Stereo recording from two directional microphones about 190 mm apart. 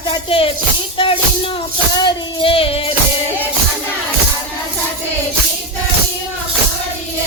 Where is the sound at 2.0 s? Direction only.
30° left (ahead or behind).